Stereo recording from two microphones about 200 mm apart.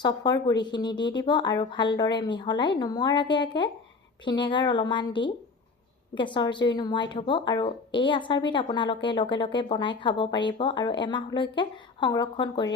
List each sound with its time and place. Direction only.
0.0 s speech: 20° left (ahead or behind)